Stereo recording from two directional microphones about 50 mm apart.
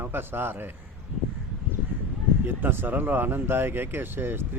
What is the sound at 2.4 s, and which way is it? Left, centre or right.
Speech, right.